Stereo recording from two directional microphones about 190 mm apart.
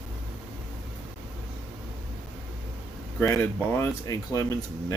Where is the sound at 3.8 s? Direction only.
15° left (ahead or behind).